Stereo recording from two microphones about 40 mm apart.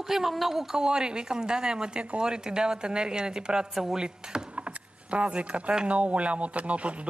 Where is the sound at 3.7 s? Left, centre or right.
Centre.